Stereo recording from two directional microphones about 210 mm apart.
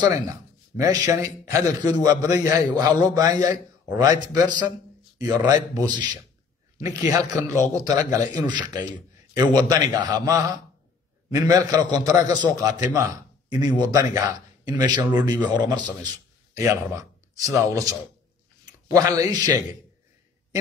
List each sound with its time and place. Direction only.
0.0 s a man's voice: 15° right (ahead or behind)